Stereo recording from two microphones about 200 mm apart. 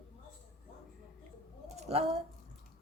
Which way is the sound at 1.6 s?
30° right (ahead or behind).